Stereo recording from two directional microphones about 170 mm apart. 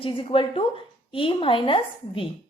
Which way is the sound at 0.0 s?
30° left (ahead or behind).